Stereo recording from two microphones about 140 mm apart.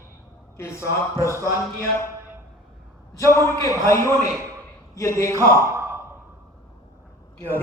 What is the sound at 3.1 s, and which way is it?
A man's voice, 20° left (ahead or behind).